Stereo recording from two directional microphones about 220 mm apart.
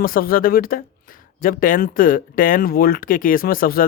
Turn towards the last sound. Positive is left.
turn(degrees=40)  # may be behind; listen again after turning